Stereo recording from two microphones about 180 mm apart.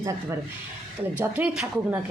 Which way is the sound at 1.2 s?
5° right (ahead or behind).